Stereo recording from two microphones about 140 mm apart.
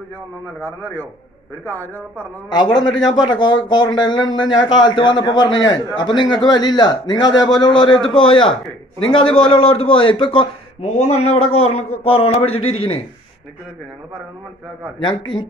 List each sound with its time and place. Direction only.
0.6 s speech: 15° left (ahead or behind)
3.2 s a man's voice: 35° left (ahead or behind)
10.8 s a man's voice: 55° left (ahead or behind)
15.0 s a man's voice: 35° left (ahead or behind)